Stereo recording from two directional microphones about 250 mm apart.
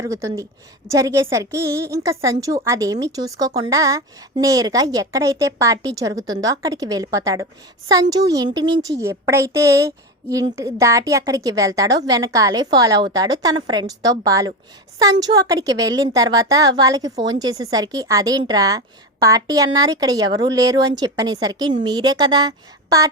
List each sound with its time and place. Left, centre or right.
0.0 s a woman's voice: centre